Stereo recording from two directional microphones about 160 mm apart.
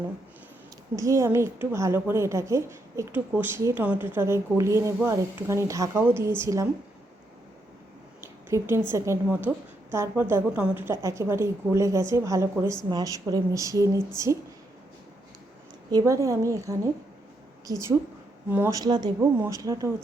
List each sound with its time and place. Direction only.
0.9 s a woman's voice: 20° right (ahead or behind)
8.2 s a sound: 15° right (ahead or behind)
8.9 s a woman's voice: 15° right (ahead or behind)
15.9 s a woman's voice: 20° right (ahead or behind)